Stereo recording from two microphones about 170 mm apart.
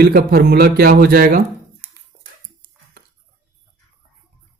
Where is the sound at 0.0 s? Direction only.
65° right (ahead or behind).